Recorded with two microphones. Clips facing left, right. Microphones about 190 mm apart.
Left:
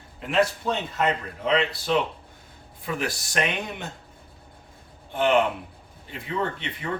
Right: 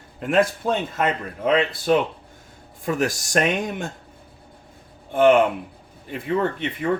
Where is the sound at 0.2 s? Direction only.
50° right (ahead or behind).